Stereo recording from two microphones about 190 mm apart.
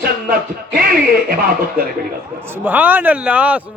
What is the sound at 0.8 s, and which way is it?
Speech, 50° right (ahead or behind).